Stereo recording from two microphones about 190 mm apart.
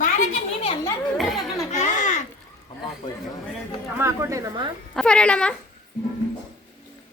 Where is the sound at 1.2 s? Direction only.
Centre (ahead or behind).